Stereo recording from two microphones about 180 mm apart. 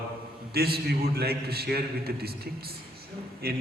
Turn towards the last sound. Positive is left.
turn(degrees=-60)  # may be behind; listen again after turning